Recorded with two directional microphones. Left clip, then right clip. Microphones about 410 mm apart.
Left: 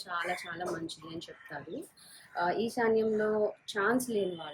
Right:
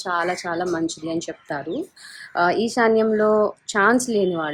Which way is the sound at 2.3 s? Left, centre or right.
Centre.